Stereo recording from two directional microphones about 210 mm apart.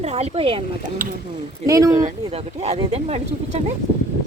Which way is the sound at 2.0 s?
30° right (ahead or behind).